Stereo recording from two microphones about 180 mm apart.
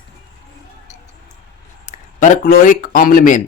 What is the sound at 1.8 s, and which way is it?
Speech, 45° left (ahead or behind).